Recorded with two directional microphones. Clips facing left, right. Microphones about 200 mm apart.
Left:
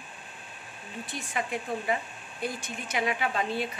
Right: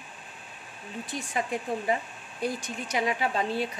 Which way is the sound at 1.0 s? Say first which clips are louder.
Right 2 dB; 40° right (ahead or behind).